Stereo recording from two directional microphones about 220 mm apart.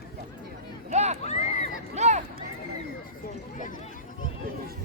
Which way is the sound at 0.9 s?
30° right (ahead or behind).